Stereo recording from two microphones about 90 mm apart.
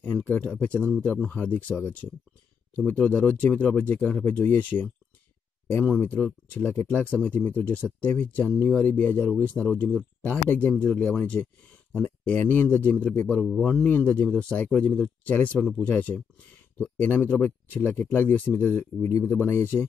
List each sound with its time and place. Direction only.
0.0 s speech: 15° left (ahead or behind)
13.4 s speech: 5° left (ahead or behind); by 19.9 s 25° left (ahead or behind)